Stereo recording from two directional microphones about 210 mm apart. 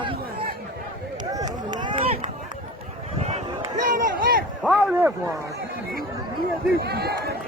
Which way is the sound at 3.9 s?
40° right (ahead or behind).